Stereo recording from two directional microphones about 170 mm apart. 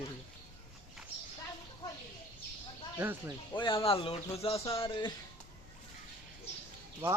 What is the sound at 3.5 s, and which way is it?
Speech, 30° left (ahead or behind).